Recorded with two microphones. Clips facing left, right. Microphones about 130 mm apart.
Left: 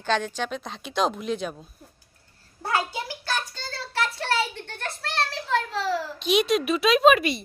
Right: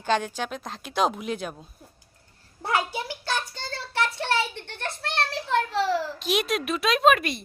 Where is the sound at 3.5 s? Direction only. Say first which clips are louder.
Right 1 dB; 20° right (ahead or behind).